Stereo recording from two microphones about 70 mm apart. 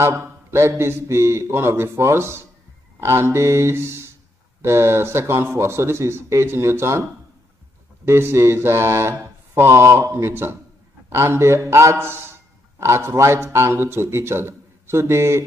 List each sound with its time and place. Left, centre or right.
0.0 s a man's voice: right